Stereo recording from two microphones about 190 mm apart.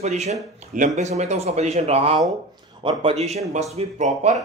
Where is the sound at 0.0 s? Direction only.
35° right (ahead or behind).